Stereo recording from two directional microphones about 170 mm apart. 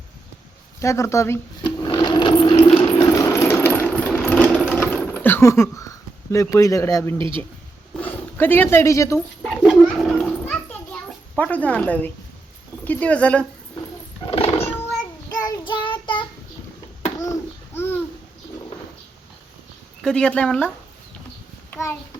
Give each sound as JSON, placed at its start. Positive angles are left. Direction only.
{"t": 0.8, "sound": "sewing machine", "side_deg": 15}
{"t": 3.0, "sound": "sewing machine", "side_deg": 20}
{"t": 7.2, "sound": "speech", "side_deg": -30}
{"t": 7.9, "sound": "speech", "side_deg": 10}
{"t": 9.5, "sound": "children playing", "side_deg": 5}
{"t": 11.3, "sound": "a woman's voice", "side_deg": 10}
{"t": 14.3, "sound": "a sound", "side_deg": 35}
{"t": 15.3, "sound": "child singing", "side_deg": 20}
{"t": 17.7, "sound": "babbling", "side_deg": 10}
{"t": 20.0, "sound": "speech", "side_deg": 5}
{"t": 21.7, "sound": "a sound", "side_deg": 15}